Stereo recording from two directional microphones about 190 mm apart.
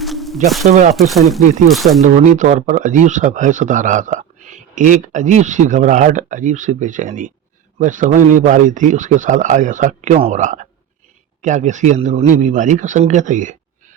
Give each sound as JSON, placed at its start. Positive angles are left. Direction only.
{"t": 0.0, "sound": "a sound", "side_deg": 0}
{"t": 0.4, "sound": "speech", "side_deg": 0}
{"t": 0.7, "sound": "a man's voice", "side_deg": -35}
{"t": 0.9, "sound": "speech", "side_deg": 0}
{"t": 2.3, "sound": "a man's voice", "side_deg": -40}